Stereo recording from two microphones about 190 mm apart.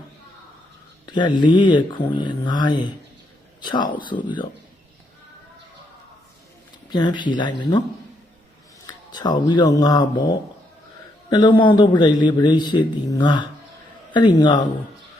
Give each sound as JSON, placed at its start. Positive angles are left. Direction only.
{"t": 1.0, "sound": "a man's voice", "side_deg": 25}
{"t": 6.9, "sound": "a man's voice", "side_deg": 25}
{"t": 8.9, "sound": "a man's voice", "side_deg": 20}